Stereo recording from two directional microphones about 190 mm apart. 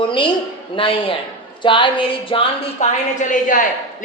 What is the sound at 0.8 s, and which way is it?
A woman's voice, 30° left (ahead or behind).